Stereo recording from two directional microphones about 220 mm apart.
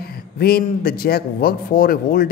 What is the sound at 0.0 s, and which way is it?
A man's voice, 45° left (ahead or behind).